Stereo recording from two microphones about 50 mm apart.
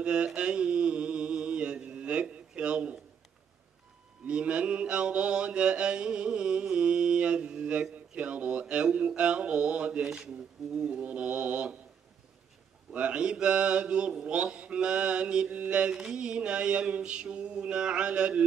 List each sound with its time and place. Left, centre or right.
0.0 s mantra: centre
4.3 s mantra: right
10.0 s speech: centre
11.1 s mantra: right
12.9 s mantra: right